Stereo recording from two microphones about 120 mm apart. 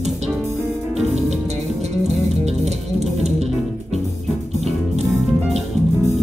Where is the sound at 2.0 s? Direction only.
65° right (ahead or behind).